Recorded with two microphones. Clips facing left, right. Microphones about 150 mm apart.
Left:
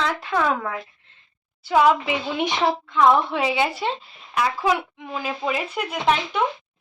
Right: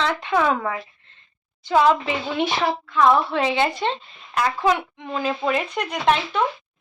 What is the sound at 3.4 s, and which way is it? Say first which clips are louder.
A child's voice: right 1 dB; 5° left (ahead or behind).